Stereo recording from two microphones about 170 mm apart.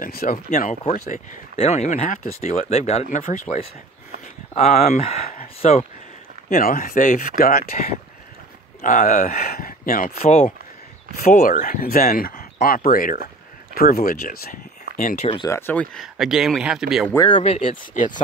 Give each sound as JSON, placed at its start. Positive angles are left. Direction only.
{"t": 0.0, "sound": "speech", "side_deg": 60}
{"t": 2.5, "sound": "speech", "side_deg": 40}
{"t": 4.6, "sound": "speech", "side_deg": 40}
{"t": 6.5, "sound": "speech", "side_deg": 50}
{"t": 11.1, "sound": "speech", "side_deg": 55}
{"t": 15.1, "sound": "speech", "side_deg": 35}
{"t": 15.4, "sound": "speech", "side_deg": 15}
{"t": 17.3, "sound": "speech", "side_deg": 35}
{"t": 17.6, "sound": "speech", "side_deg": 50}